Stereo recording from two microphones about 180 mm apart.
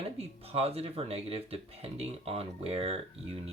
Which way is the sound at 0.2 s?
35° right (ahead or behind).